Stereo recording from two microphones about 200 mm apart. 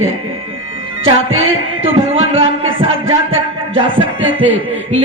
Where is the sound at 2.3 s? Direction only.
30° right (ahead or behind).